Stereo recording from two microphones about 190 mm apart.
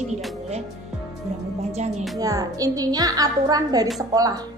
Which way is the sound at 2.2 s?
20° right (ahead or behind).